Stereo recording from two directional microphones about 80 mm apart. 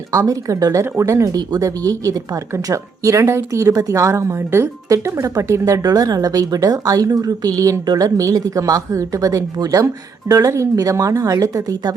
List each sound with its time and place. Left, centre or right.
0.1 s speech: right
1.4 s speech: right
5.8 s speech: right